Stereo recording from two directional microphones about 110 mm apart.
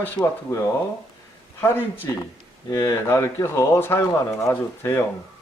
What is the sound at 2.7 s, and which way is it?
Speech, 25° left (ahead or behind).